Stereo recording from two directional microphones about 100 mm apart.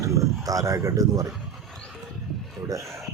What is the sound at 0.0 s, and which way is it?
Speech, 30° right (ahead or behind).